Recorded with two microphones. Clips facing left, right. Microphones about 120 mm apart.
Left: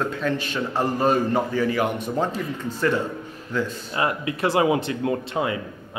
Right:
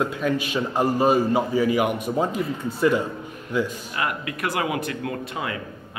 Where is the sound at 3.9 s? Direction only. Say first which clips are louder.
Left 6 dB; 30° left (ahead or behind).